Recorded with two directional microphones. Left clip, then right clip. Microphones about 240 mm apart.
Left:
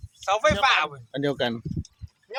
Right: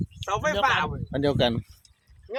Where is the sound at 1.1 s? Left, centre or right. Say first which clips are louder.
Right 3 dB; centre.